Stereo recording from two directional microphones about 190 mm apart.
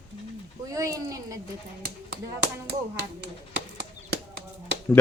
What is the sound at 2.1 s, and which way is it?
Speech, 60° right (ahead or behind).